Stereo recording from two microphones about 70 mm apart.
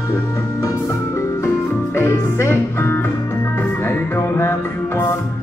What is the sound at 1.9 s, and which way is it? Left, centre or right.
Music, left.